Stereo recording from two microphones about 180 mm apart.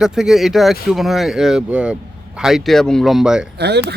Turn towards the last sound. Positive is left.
turn(degrees=-65)  # may be behind; listen again after turning